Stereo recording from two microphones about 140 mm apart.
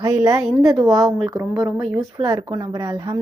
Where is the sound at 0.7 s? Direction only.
25° right (ahead or behind).